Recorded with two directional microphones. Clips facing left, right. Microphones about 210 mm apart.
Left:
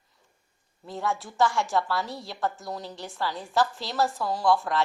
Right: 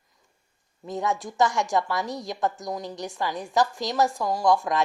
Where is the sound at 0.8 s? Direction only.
20° right (ahead or behind).